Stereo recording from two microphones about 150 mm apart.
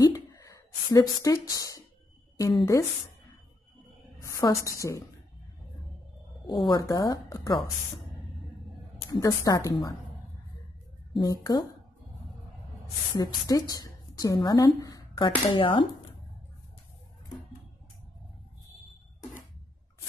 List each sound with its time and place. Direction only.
0.0 s a sound: 25° left (ahead or behind)
2.3 s a woman's voice: 20° left (ahead or behind)
4.2 s a woman's voice: 20° left (ahead or behind)
6.6 s a woman's voice: 25° left (ahead or behind)
9.2 s a woman's voice: 20° left (ahead or behind)
11.1 s speech: centre (ahead or behind)
13.1 s speech: 25° left (ahead or behind)